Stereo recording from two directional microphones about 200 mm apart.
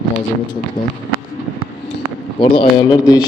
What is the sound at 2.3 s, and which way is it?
Speech, 25° left (ahead or behind).